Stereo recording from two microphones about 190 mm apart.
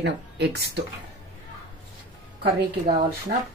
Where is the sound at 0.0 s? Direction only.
60° right (ahead or behind).